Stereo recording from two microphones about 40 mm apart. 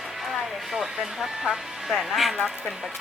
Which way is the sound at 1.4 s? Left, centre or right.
Centre.